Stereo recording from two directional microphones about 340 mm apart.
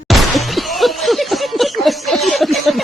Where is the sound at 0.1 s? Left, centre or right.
Centre.